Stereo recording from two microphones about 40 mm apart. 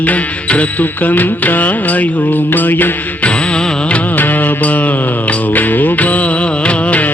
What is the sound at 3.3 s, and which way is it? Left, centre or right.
Music, left.